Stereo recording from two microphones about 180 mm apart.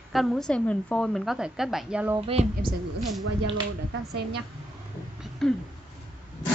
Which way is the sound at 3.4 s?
80° right.